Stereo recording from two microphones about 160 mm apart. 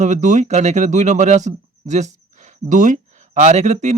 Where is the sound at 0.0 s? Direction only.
50° right (ahead or behind).